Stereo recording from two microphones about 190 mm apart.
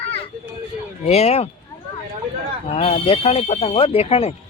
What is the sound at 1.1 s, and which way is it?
Speech, 35° left (ahead or behind).